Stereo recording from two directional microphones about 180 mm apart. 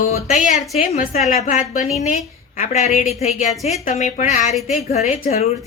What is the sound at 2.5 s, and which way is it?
A woman's voice, 40° left (ahead or behind).